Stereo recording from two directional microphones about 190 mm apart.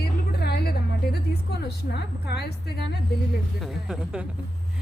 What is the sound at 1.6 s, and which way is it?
A woman's voice, 60° left (ahead or behind).